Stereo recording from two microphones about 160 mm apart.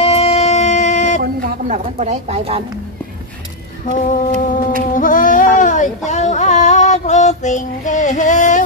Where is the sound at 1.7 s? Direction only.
45° right (ahead or behind).